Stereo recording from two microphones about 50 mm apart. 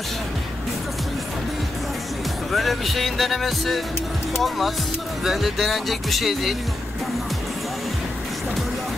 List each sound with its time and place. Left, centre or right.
2.5 s speech: centre